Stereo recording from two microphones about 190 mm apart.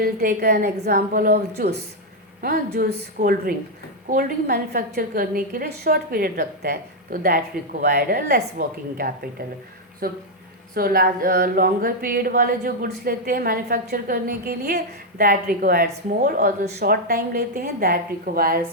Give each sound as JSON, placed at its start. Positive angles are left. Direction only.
{"t": 0.0, "sound": "a woman's voice", "side_deg": -55}